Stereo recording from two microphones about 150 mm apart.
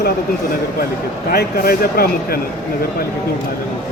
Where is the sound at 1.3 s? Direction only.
85° left.